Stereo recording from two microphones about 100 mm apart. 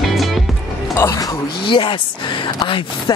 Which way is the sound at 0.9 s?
30° left (ahead or behind).